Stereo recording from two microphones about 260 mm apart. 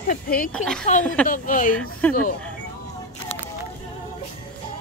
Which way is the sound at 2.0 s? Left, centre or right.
Centre.